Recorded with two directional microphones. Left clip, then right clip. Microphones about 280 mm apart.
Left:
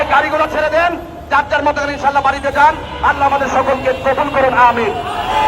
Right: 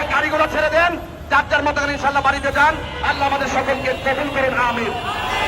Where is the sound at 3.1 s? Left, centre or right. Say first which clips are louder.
Left 6 dB; centre.